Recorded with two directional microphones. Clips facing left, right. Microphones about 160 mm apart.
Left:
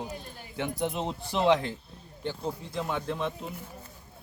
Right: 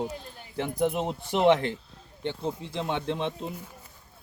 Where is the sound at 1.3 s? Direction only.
65° right (ahead or behind).